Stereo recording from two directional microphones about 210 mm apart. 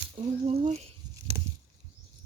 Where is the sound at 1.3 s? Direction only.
15° right (ahead or behind).